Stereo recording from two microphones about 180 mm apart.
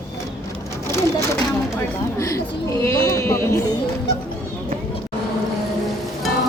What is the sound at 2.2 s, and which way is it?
Sheep, 15° left (ahead or behind).